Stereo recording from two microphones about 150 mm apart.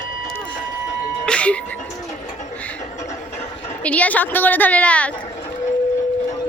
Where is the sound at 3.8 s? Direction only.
10° left (ahead or behind).